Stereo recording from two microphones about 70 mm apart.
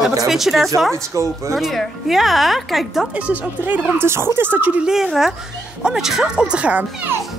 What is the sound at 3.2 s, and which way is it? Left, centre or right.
Speech, right.